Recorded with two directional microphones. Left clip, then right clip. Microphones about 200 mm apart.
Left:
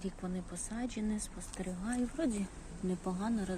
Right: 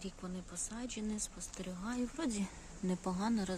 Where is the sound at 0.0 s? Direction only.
5° right (ahead or behind).